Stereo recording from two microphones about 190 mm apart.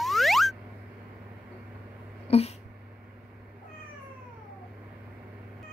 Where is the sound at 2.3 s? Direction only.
30° left (ahead or behind).